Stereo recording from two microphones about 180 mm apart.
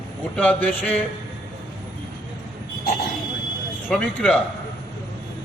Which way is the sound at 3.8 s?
Centre (ahead or behind).